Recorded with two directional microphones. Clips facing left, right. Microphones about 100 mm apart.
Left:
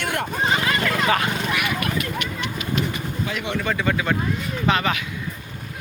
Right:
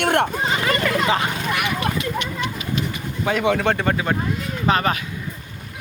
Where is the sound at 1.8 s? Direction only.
25° right (ahead or behind).